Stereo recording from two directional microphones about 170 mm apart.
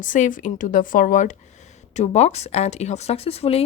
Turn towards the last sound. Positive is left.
turn(degrees=35)  # may be behind; listen again after turning